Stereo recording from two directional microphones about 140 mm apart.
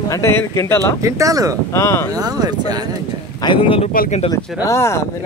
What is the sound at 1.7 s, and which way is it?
Speech, 20° left (ahead or behind).